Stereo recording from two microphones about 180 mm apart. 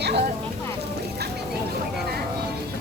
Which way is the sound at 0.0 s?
65° right (ahead or behind).